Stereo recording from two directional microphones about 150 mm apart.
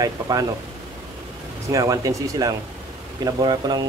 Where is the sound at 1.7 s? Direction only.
20° right (ahead or behind).